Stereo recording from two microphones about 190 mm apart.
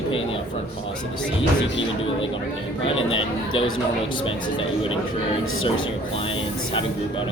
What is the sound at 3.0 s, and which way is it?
Speech, 30° left (ahead or behind).